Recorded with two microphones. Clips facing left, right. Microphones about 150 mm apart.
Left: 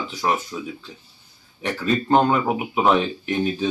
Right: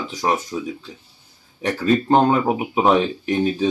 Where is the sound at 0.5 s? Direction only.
25° right (ahead or behind).